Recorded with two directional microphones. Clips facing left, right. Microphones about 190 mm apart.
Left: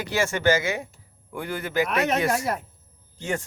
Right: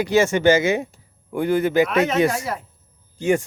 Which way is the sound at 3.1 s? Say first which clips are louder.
Right 10 dB; 15° right (ahead or behind).